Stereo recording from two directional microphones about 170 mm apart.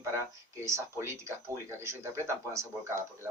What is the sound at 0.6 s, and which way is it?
A man's voice, 15° right (ahead or behind).